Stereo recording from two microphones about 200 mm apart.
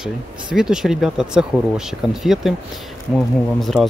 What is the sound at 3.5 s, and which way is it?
Speech, centre (ahead or behind).